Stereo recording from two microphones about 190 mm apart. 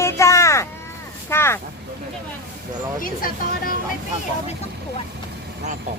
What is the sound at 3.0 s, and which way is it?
Speech, 50° left (ahead or behind).